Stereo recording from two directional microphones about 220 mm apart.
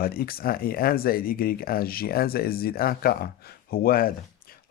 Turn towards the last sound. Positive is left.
turn(degrees=40)  # may be behind; listen again after turning